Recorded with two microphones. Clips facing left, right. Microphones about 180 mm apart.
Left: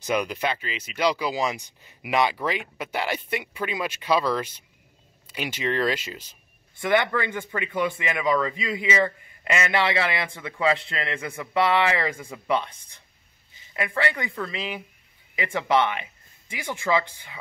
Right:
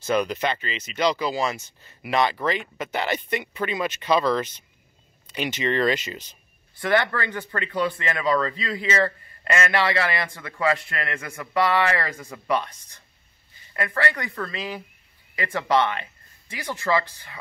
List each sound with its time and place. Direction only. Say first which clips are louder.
0.0 s speech: right 2 dB; 10° left (ahead or behind)
13.7 s speech: even; 20° left (ahead or behind)